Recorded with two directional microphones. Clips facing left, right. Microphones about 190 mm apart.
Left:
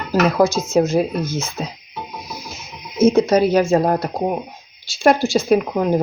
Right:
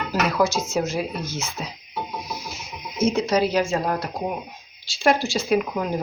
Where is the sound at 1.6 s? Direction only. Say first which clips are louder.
Left 6 dB; 35° left (ahead or behind).